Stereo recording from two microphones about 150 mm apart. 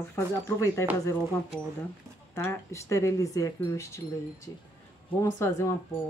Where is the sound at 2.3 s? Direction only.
20° left (ahead or behind).